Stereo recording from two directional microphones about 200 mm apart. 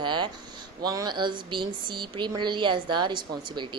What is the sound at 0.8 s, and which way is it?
Speech, 20° right (ahead or behind).